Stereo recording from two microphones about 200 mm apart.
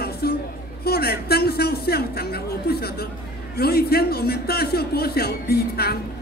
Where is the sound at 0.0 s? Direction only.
50° left (ahead or behind).